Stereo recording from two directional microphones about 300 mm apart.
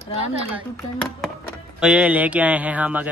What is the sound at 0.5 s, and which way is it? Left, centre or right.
Speech, centre.